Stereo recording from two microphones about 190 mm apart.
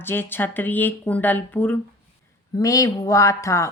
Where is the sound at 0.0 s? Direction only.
10° left (ahead or behind).